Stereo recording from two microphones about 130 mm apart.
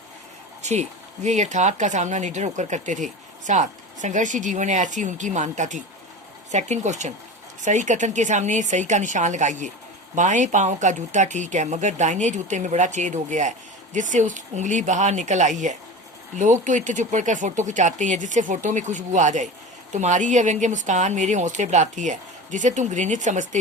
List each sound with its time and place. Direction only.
0.6 s speech: 65° right (ahead or behind)